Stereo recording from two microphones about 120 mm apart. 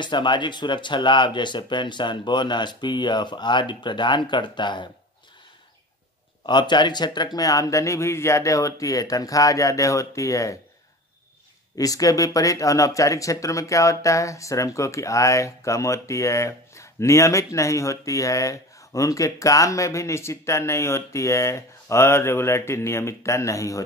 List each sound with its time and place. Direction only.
0.0 s speech: 40° left (ahead or behind)
6.4 s speech: 40° left (ahead or behind)
11.7 s speech: 30° left (ahead or behind)